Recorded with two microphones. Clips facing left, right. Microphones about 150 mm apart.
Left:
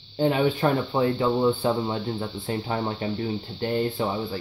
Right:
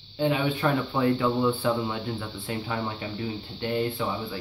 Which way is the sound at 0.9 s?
30° left (ahead or behind).